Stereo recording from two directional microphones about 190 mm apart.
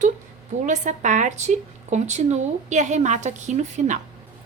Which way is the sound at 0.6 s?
40° right (ahead or behind).